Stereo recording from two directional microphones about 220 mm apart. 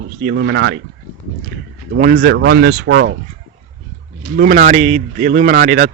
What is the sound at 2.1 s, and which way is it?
Speech, 50° right (ahead or behind).